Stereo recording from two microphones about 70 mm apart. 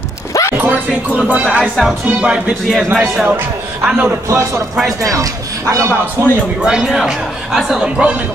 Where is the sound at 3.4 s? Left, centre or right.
Right.